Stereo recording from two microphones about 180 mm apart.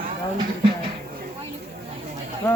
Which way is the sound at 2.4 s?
10° left (ahead or behind).